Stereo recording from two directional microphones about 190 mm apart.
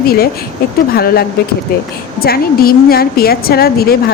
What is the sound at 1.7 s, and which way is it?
A woman's voice, 55° left (ahead or behind).